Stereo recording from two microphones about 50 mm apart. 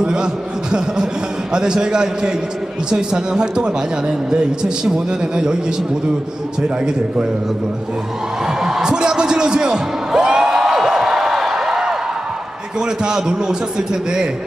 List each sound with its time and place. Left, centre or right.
0.0 s a man's voice: centre
8.5 s a sound: centre
13.0 s a man's voice: centre